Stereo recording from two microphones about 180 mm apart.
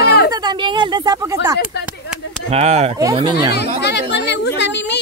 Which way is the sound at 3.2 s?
25° right (ahead or behind).